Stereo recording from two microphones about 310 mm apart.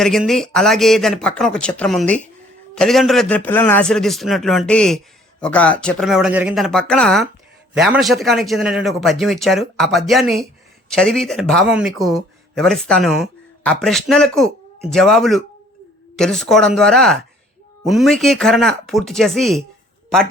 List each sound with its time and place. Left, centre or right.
0.0 s a man's voice: centre